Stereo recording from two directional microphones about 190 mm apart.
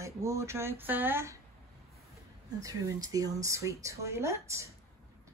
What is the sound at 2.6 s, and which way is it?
Speech, 20° right (ahead or behind).